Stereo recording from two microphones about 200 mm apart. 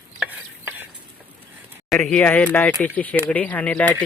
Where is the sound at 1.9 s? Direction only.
5° left (ahead or behind).